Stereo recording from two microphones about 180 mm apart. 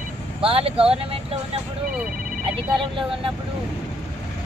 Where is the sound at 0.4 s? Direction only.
30° right (ahead or behind).